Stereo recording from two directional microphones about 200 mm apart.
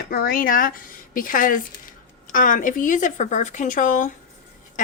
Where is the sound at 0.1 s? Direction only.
45° left (ahead or behind).